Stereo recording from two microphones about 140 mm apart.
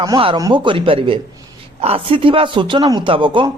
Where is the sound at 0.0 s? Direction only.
35° right (ahead or behind).